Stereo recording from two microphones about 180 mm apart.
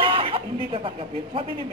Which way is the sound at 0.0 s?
30° right (ahead or behind).